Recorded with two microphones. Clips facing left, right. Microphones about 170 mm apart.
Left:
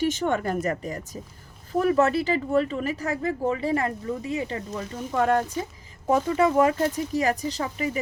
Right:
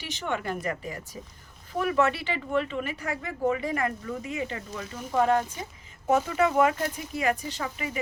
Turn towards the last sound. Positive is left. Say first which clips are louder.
# left 5 dB
turn(degrees=35)  # may be behind; listen again after turning